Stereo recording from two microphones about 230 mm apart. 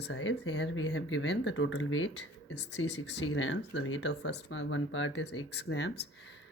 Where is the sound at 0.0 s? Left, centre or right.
Left.